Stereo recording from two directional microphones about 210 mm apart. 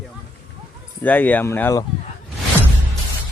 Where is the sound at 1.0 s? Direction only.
10° left (ahead or behind).